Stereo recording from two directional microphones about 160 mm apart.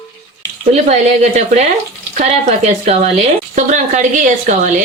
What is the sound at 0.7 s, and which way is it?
Speech, 45° right (ahead or behind).